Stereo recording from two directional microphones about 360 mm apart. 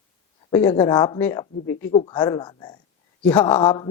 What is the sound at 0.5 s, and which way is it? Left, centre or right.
Speech, centre.